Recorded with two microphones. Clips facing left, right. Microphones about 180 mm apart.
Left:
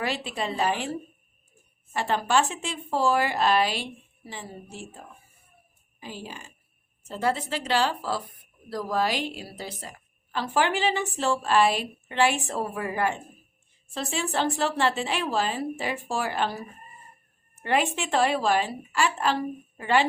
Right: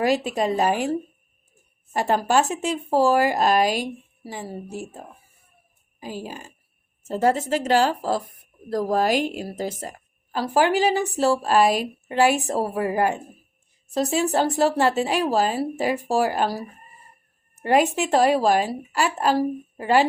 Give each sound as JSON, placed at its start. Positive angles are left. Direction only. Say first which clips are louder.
{"t": 0.0, "sound": "speech", "louder": "right 8 dB", "side_deg": -40}
{"t": 1.9, "sound": "a woman's voice", "louder": "right 4 dB", "side_deg": -40}